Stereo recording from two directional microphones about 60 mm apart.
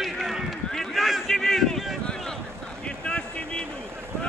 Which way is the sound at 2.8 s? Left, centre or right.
Centre.